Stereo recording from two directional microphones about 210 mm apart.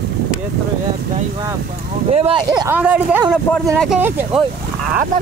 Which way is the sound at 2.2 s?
25° right (ahead or behind).